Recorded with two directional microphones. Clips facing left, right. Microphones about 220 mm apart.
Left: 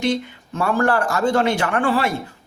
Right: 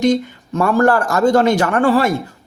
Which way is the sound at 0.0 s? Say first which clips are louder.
Right 6 dB; 40° right (ahead or behind).